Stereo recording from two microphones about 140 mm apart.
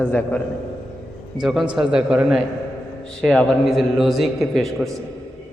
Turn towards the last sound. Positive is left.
turn(degrees=0)  # may be behind; listen again after turning